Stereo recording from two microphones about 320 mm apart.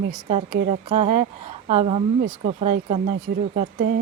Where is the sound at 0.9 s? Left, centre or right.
Centre.